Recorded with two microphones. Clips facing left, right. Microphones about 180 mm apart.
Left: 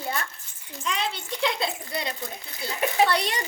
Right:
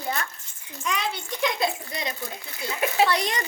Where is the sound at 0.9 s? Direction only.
25° left (ahead or behind).